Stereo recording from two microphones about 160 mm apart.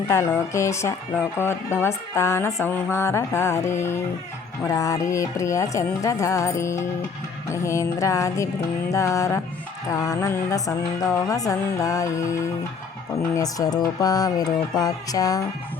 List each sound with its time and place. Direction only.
0.1 s speech: 15° left (ahead or behind)
4.6 s music: 20° left (ahead or behind)